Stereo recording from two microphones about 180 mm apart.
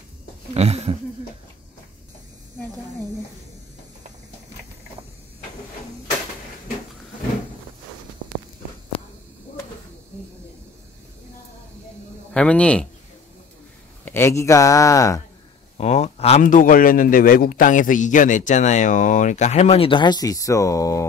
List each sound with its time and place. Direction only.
0.6 s a sound: 35° right (ahead or behind)
12.4 s a man's voice: 5° left (ahead or behind)
14.0 s a man's voice: 15° left (ahead or behind)
15.8 s a man's voice: 40° left (ahead or behind); by 21.1 s 15° left (ahead or behind)